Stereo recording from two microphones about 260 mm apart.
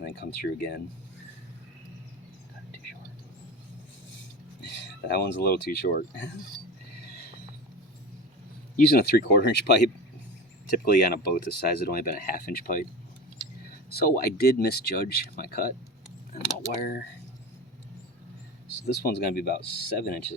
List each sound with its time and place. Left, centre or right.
0.0 s speech: left
4.6 s speech: left
8.7 s speech: left
13.9 s speech: left
19.0 s speech: left